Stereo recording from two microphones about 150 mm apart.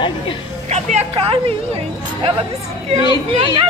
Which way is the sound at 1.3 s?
35° right (ahead or behind).